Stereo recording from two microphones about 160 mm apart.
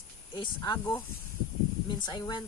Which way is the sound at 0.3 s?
30° left (ahead or behind).